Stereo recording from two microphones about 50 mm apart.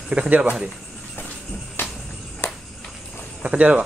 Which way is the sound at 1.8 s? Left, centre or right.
Left.